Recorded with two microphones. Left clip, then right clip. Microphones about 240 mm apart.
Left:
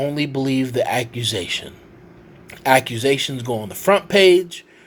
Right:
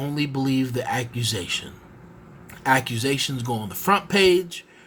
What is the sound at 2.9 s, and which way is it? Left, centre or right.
Speech, right.